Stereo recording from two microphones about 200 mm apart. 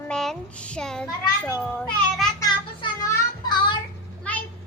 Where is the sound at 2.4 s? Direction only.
15° left (ahead or behind).